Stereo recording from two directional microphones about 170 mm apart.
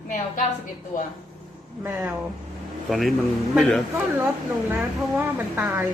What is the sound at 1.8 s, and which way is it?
Speech, 10° right (ahead or behind).